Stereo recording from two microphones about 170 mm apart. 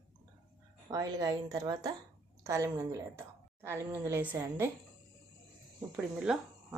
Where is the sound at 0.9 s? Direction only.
20° right (ahead or behind).